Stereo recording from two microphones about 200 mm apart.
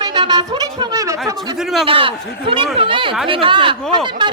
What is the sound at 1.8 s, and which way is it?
Speech, 25° right (ahead or behind).